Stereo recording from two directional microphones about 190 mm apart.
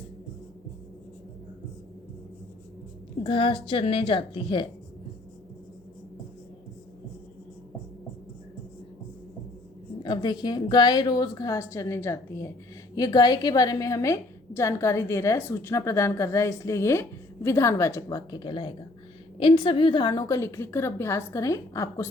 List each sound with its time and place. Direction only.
3.2 s a woman's voice: 25° left (ahead or behind)
10.0 s a woman's voice: 25° left (ahead or behind)